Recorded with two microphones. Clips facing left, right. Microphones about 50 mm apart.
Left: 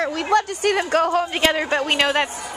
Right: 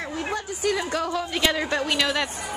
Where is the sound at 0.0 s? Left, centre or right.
Left.